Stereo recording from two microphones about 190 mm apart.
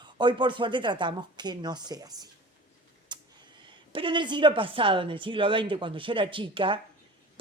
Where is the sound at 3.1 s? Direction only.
25° right (ahead or behind).